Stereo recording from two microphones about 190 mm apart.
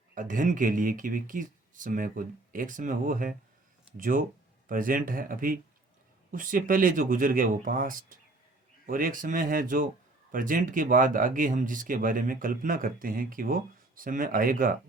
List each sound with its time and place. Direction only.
0.1 s speech: 45° right (ahead or behind)